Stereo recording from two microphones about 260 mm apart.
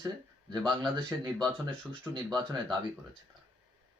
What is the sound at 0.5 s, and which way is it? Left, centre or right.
Speech, centre.